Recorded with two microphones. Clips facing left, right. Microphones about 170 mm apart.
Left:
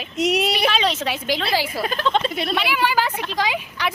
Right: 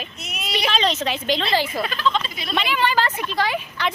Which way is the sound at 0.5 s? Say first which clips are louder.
Left 1 dB; 10° left (ahead or behind).